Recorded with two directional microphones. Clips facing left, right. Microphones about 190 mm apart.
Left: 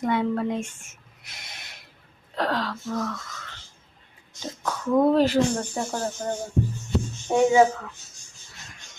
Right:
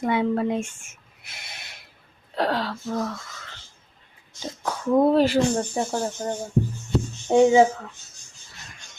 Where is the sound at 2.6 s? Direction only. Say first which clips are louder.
Right 1 dB; 25° right (ahead or behind).